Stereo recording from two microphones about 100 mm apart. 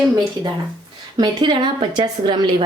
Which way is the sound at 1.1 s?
50° right (ahead or behind).